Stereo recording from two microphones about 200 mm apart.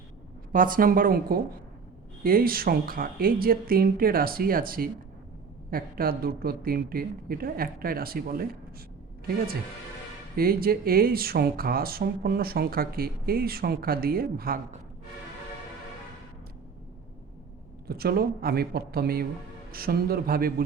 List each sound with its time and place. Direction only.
0.5 s speech: 45° right (ahead or behind)
10.3 s speech: 50° right (ahead or behind)
17.8 s speech: 50° right (ahead or behind)